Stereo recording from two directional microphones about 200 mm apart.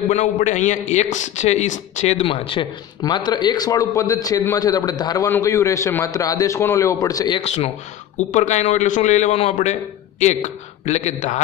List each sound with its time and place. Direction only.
0.1 s a man's voice: 35° left (ahead or behind)